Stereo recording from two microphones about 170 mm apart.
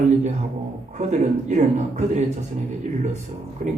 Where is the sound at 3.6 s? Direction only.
50° right (ahead or behind).